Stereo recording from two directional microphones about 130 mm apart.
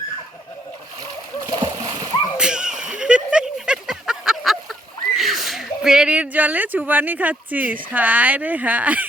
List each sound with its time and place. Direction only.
1.5 s splash: 35° right (ahead or behind)
2.4 s a sound: 5° right (ahead or behind)
6.3 s speech: 10° right (ahead or behind)